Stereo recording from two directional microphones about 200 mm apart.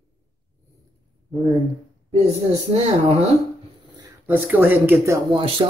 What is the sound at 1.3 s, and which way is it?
Speech, centre (ahead or behind).